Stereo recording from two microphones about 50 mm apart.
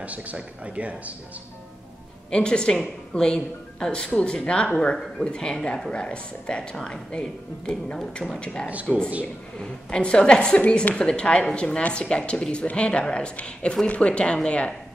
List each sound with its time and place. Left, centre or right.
0.0 s speech: right
2.3 s a woman's voice: centre